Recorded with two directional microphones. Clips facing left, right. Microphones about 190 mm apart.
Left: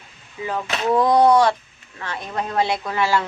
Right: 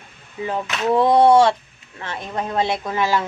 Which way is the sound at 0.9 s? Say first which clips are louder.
Right 2 dB; 25° right (ahead or behind).